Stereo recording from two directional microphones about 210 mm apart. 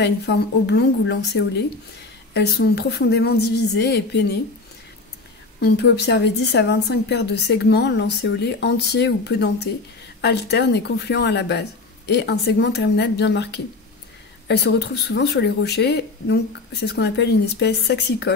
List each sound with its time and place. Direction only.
0.0 s a woman's voice: 50° left (ahead or behind)
5.6 s a woman's voice: 55° left (ahead or behind)